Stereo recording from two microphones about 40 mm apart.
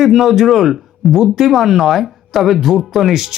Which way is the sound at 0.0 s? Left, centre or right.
Centre.